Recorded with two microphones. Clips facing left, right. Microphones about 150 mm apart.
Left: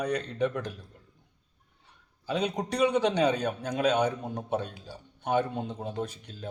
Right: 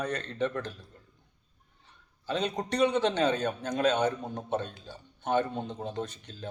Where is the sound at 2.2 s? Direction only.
10° left (ahead or behind).